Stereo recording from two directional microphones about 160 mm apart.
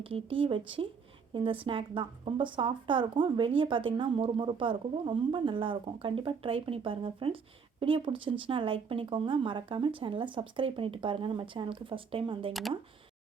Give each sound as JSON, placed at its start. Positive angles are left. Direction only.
{"t": 0.0, "sound": "a woman's voice", "side_deg": -35}